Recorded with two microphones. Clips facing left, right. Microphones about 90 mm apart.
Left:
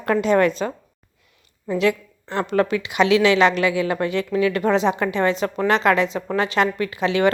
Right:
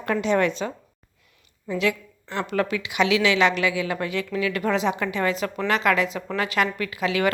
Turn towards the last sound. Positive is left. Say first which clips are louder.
# left 4 dB
turn(degrees=30)  # may be behind; listen again after turning